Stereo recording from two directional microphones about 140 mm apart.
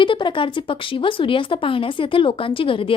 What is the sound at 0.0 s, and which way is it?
Speech, 35° left (ahead or behind).